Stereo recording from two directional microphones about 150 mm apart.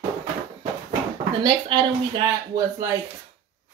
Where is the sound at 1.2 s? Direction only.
30° right (ahead or behind).